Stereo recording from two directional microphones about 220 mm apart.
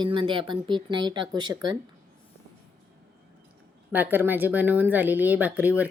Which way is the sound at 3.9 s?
10° right (ahead or behind).